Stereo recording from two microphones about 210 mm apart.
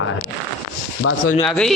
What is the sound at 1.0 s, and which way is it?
Speech, 90° left.